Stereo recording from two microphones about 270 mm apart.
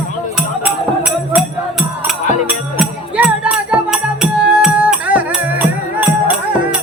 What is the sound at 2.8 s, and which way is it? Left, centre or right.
Music, centre.